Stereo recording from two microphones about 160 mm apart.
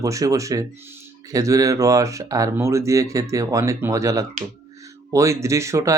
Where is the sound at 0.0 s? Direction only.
20° right (ahead or behind).